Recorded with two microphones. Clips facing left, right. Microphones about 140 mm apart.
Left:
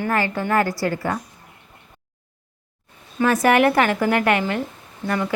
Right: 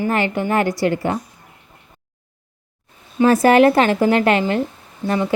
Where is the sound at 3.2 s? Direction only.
30° right (ahead or behind).